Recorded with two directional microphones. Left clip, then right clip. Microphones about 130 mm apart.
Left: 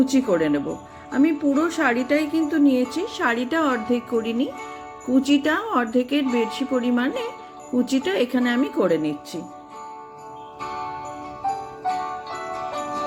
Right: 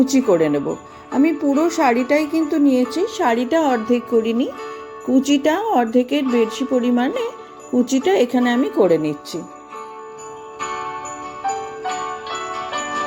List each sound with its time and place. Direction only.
0.1 s speech: 25° right (ahead or behind)
10.6 s jingle bell: 25° right (ahead or behind)